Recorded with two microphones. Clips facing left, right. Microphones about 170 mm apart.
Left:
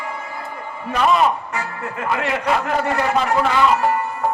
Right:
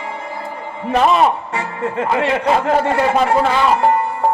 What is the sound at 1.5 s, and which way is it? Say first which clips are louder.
Speech: right 6 dB; 30° right (ahead or behind).